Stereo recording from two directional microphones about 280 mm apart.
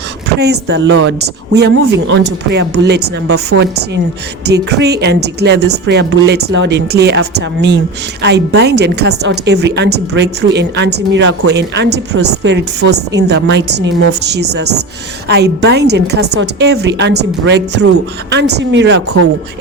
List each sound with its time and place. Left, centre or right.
0.3 s a woman's voice: right